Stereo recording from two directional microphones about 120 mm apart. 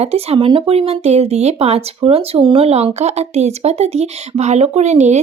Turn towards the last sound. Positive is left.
turn(degrees=-70)  # may be behind; listen again after turning